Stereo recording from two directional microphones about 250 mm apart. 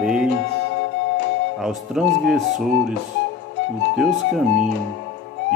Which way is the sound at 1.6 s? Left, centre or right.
Centre.